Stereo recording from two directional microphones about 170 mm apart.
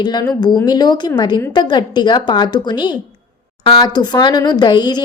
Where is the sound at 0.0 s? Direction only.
25° left (ahead or behind).